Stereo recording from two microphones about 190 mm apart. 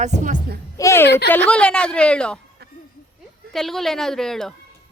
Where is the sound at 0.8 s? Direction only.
15° left (ahead or behind).